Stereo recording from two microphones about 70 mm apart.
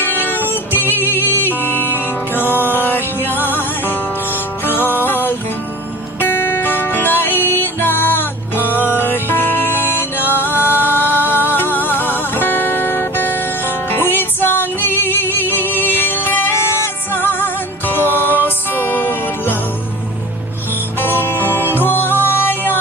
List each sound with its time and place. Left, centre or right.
0.0 s music: left
21.0 s music: left